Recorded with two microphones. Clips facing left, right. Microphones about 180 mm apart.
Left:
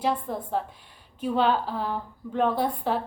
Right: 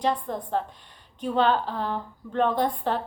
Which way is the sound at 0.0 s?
5° left (ahead or behind).